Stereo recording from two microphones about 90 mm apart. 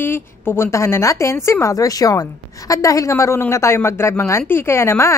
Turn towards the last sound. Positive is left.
turn(degrees=30)  # may be behind; listen again after turning